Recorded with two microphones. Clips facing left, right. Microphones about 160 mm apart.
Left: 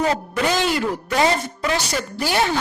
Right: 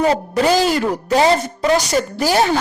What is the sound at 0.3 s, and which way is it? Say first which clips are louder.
A woman's voice: right 6 dB; 35° right (ahead or behind).